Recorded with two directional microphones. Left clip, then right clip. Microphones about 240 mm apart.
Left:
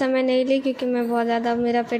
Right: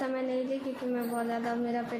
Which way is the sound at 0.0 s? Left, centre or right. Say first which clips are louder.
Left 11 dB; left.